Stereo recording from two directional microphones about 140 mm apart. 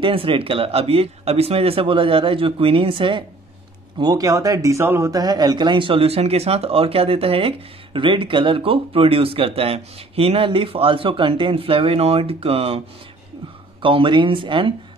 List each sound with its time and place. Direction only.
0.0 s speech: 40° right (ahead or behind)
13.8 s speech: 35° right (ahead or behind)